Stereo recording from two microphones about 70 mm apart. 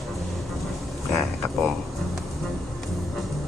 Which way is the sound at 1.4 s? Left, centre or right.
Left.